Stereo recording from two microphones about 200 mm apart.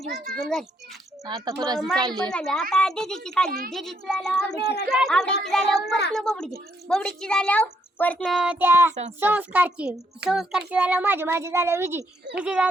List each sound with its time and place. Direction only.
0.1 s a woman's voice: centre (ahead or behind)
1.2 s a child's voice: 15° right (ahead or behind)
1.8 s a woman's voice: centre (ahead or behind)
5.8 s a child's voice: 55° left (ahead or behind)
6.1 s a woman's voice: 5° left (ahead or behind)
8.4 s a child's voice: 10° right (ahead or behind)